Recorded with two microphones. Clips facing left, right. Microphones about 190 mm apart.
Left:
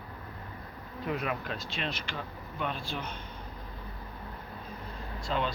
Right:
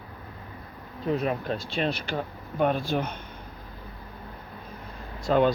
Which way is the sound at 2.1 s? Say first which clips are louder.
Right 8 dB; 50° right (ahead or behind).